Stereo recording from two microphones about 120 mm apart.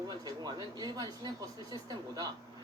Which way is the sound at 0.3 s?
35° right (ahead or behind).